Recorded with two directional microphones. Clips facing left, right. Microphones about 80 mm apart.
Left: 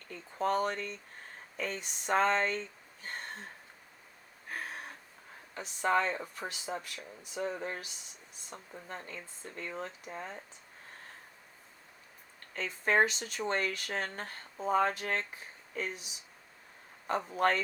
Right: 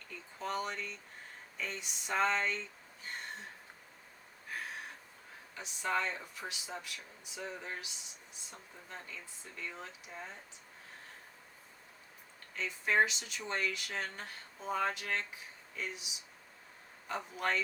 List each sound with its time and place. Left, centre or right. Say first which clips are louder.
0.3 s speech: left 7 dB; left
5.5 s speech: left 6 dB; left
12.5 s speech: left 3 dB; left